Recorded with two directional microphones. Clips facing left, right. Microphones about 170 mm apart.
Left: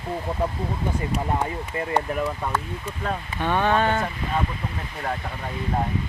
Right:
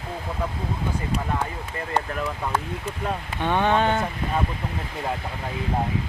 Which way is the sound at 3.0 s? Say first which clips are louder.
Even; 15° right (ahead or behind).